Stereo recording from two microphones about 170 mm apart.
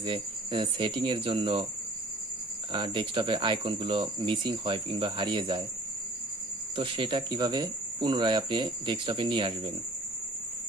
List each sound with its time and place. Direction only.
0.0 s speech: 30° right (ahead or behind)
2.7 s cricket: 30° right (ahead or behind)
6.7 s cricket: 30° right (ahead or behind)